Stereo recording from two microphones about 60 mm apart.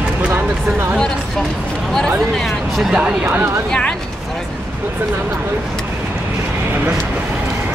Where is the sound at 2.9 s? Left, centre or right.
Centre.